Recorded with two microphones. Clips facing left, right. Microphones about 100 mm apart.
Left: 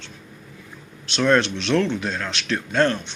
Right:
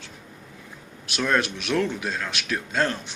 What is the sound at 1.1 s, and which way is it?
Speech, 10° right (ahead or behind).